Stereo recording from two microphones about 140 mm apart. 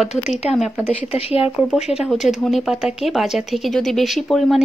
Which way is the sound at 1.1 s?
45° left (ahead or behind).